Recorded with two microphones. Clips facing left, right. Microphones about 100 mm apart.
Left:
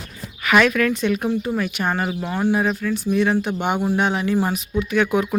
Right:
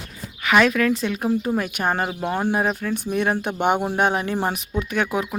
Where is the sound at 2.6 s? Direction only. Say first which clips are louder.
Left 1 dB; 35° right (ahead or behind).